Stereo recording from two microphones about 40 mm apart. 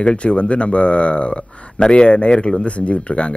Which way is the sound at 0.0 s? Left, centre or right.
Left.